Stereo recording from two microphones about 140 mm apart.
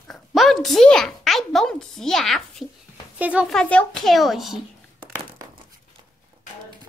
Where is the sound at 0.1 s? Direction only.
Centre (ahead or behind).